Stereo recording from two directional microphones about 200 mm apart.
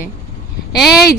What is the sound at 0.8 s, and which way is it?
Speech, centre (ahead or behind).